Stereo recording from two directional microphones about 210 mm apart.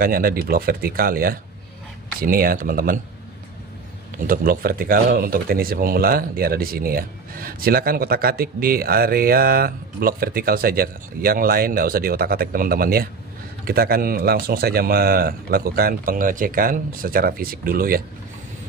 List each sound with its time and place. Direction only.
0.0 s speech: 45° right (ahead or behind)
4.3 s speech: 45° right (ahead or behind)